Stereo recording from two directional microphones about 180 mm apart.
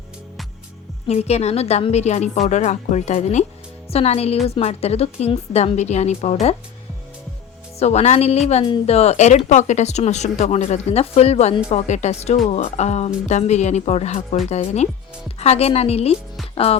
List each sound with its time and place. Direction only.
1.0 s speech: 35° left (ahead or behind)
7.8 s speech: 35° left (ahead or behind)